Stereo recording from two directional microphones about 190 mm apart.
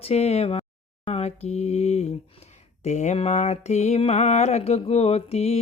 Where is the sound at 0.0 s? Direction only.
35° left (ahead or behind).